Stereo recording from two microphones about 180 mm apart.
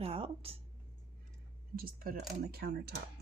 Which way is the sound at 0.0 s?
30° right (ahead or behind).